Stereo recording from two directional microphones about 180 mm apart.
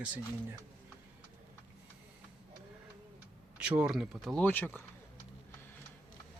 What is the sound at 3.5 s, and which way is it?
Speech, 5° right (ahead or behind).